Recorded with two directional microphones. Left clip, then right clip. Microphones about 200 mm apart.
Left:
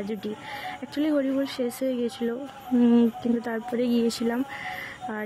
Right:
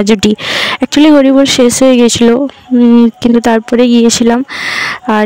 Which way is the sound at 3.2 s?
55° right (ahead or behind).